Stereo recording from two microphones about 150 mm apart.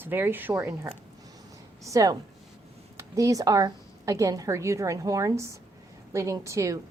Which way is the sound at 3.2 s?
20° right (ahead or behind).